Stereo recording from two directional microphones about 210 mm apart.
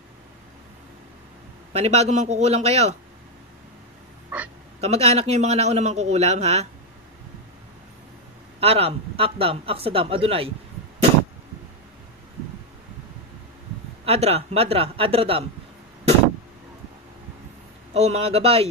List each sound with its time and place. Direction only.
1.7 s a man's voice: 30° right (ahead or behind)
4.3 s a sound: 5° right (ahead or behind)
4.7 s a man's voice: 30° right (ahead or behind)
8.5 s a man's voice: 30° right (ahead or behind)
14.0 s a man's voice: 30° right (ahead or behind)
17.9 s a man's voice: 30° right (ahead or behind)